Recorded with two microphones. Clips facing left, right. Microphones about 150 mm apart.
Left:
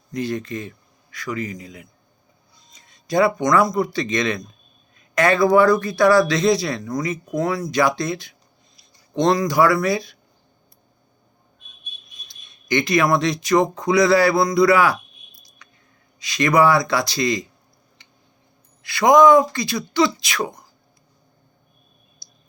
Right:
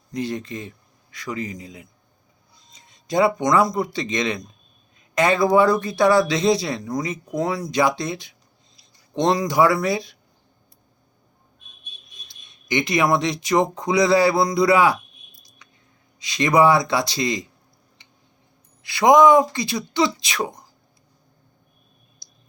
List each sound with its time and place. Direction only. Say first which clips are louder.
0.1 s a man's voice: left 2 dB; 20° right (ahead or behind)
2.7 s a sound: left 2 dB; 20° right (ahead or behind)
3.4 s a man's voice: left 1 dB; 30° right (ahead or behind)
12.6 s a man's voice: left 2 dB; 20° right (ahead or behind)
16.2 s a man's voice: even; 25° right (ahead or behind)
18.9 s a man's voice: left 1 dB; 25° right (ahead or behind)